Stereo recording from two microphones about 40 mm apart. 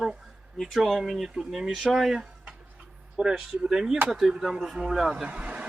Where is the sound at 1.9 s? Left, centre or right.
Centre.